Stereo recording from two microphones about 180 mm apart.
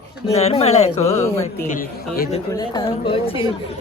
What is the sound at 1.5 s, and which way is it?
Speech, 55° left (ahead or behind).